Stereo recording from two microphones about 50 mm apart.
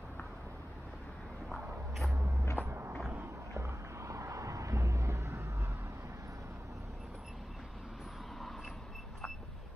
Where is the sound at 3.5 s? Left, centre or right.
Right.